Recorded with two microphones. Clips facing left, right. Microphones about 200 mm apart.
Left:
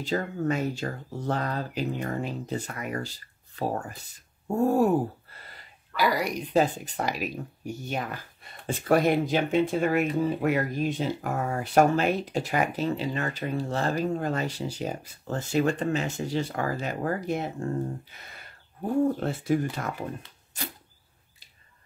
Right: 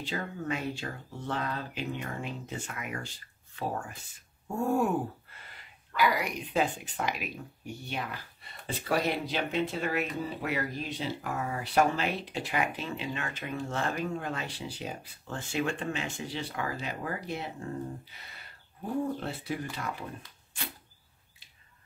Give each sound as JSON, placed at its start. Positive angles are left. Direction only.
{"t": 0.0, "sound": "speech", "side_deg": 40}
{"t": 19.1, "sound": "speech", "side_deg": 45}